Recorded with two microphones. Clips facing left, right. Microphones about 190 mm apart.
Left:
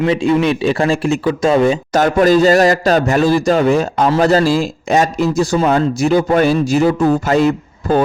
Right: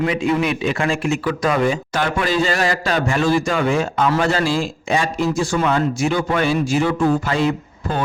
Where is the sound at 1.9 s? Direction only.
40° left (ahead or behind).